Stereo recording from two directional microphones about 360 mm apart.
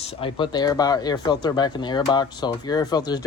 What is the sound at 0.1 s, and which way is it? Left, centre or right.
Speech, centre.